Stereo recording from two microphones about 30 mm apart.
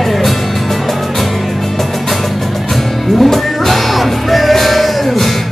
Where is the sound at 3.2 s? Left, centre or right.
Centre.